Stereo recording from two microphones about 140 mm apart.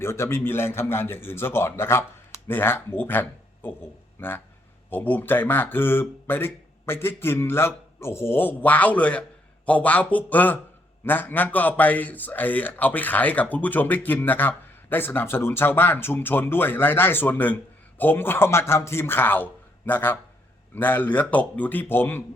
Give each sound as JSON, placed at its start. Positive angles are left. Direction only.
{"t": 0.0, "sound": "a man's voice", "side_deg": 20}